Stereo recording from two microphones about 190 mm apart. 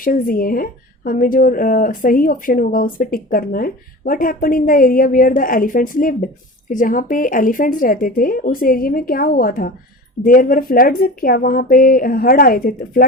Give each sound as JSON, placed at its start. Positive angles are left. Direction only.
{"t": 0.0, "sound": "speech", "side_deg": 50}